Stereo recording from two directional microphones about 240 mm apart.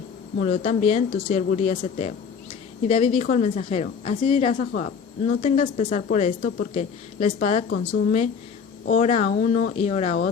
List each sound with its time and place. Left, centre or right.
0.3 s speech: left